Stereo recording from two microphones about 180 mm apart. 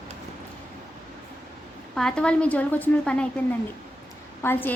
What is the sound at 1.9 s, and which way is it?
A woman's voice, 5° left (ahead or behind).